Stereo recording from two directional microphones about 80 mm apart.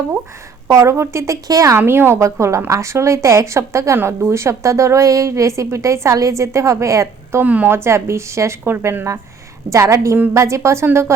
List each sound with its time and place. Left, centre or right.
0.7 s a woman's voice: right
1.7 s a woman's voice: right
7.4 s a woman's voice: centre
7.8 s a woman's voice: right